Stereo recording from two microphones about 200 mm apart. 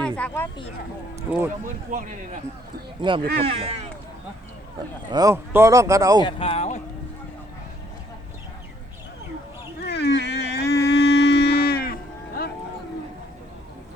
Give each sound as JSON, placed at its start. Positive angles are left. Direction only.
{"t": 0.0, "sound": "a sound", "side_deg": 10}
{"t": 1.3, "sound": "speech", "side_deg": -10}
{"t": 1.9, "sound": "speech", "side_deg": -40}
{"t": 3.0, "sound": "speech", "side_deg": -25}
{"t": 5.1, "sound": "speech", "side_deg": -15}
{"t": 6.2, "sound": "speech", "side_deg": 30}
{"t": 9.8, "sound": "a sound", "side_deg": 55}